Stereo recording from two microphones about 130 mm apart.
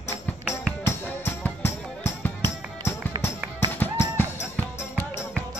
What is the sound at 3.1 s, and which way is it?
Music, 35° right (ahead or behind).